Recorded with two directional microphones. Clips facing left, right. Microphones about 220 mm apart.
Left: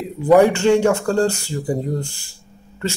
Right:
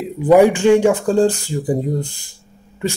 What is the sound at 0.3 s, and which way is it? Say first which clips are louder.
Speech: right 2 dB; 15° right (ahead or behind).